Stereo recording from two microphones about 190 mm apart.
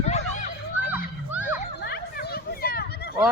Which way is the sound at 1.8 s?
55° left (ahead or behind).